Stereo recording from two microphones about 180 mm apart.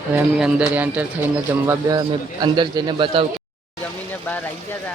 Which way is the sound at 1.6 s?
20° right (ahead or behind).